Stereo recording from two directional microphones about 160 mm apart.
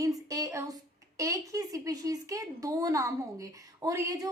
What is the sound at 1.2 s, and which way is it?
Speech, 20° right (ahead or behind).